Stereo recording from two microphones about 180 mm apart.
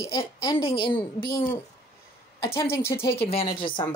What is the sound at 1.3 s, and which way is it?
Speech, 50° left (ahead or behind).